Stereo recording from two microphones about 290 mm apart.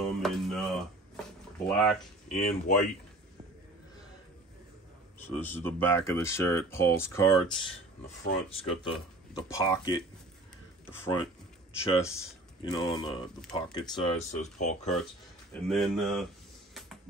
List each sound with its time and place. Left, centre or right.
0.0 s a sound: centre
1.7 s speech: centre
2.2 s speech: left
5.2 s speech: centre; by 14.8 s left
15.7 s speech: centre